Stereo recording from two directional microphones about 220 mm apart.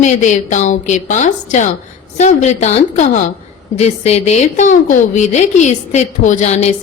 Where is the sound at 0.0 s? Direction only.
35° left (ahead or behind).